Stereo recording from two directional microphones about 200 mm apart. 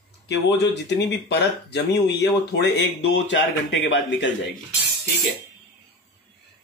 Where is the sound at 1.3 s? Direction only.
55° left (ahead or behind).